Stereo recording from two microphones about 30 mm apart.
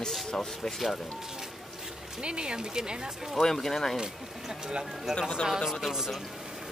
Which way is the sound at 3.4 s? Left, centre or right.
Centre.